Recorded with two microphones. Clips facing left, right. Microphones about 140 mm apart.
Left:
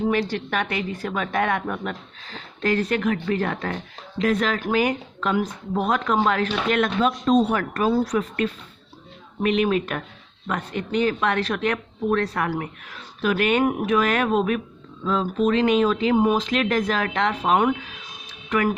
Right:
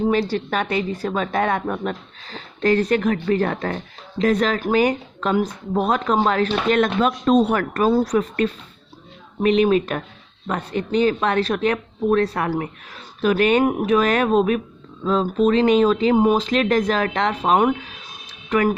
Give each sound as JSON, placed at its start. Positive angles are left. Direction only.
{"t": 0.1, "sound": "a woman's voice", "side_deg": -35}
{"t": 7.3, "sound": "a woman's voice", "side_deg": -60}